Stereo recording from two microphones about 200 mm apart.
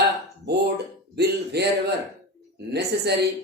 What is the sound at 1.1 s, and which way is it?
Speech, 55° right (ahead or behind).